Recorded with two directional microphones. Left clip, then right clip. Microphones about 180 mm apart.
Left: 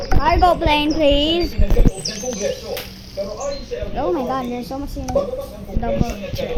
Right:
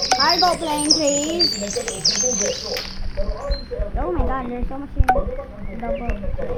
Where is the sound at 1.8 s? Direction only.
50° right (ahead or behind).